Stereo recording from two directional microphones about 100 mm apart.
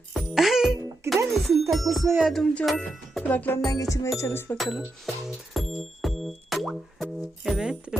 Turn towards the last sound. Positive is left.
turn(degrees=-5)  # may be behind; listen again after turning